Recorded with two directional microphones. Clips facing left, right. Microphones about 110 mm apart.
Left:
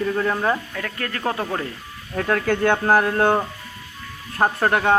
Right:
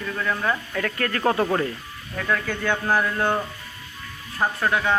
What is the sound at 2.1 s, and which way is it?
Speech, 45° left (ahead or behind).